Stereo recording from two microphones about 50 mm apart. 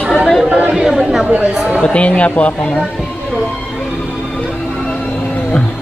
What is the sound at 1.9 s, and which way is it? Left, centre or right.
Speech, left.